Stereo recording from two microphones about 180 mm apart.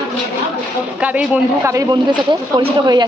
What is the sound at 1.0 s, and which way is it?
Speech, 10° right (ahead or behind).